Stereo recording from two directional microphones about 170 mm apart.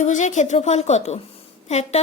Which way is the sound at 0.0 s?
45° left (ahead or behind).